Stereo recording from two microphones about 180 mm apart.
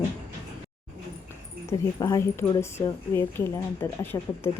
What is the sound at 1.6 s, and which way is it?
Speech, 15° left (ahead or behind).